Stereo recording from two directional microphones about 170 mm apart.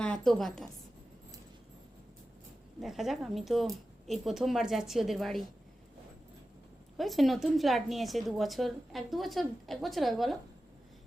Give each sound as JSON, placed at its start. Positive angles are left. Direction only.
{"t": 0.0, "sound": "a woman's voice", "side_deg": 5}
{"t": 2.8, "sound": "a woman's voice", "side_deg": 0}
{"t": 6.9, "sound": "a woman's voice", "side_deg": 0}